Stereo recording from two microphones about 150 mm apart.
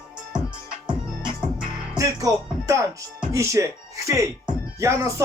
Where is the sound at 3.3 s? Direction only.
20° right (ahead or behind).